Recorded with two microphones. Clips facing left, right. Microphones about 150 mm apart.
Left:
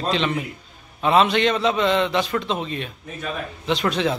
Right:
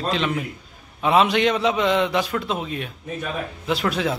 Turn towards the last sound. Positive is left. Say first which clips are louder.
# left 1 dB
turn(degrees=-5)  # may be behind; listen again after turning